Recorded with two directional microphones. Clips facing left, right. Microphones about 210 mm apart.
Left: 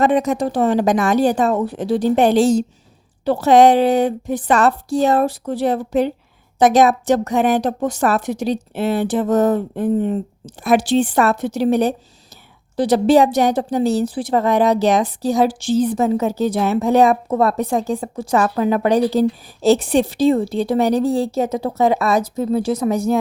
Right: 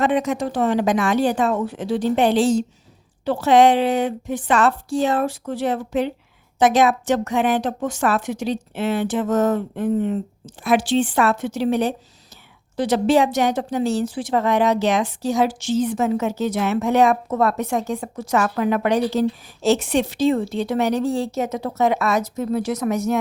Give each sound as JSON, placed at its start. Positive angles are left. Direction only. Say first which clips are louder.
{"t": 0.0, "sound": "a woman's voice", "louder": "left 4 dB", "side_deg": 40}